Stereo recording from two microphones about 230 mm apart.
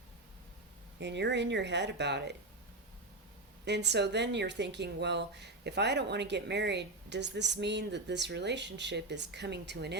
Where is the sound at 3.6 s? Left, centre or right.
Right.